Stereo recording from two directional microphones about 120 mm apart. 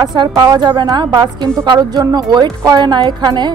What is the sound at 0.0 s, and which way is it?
A woman's voice, 35° right (ahead or behind).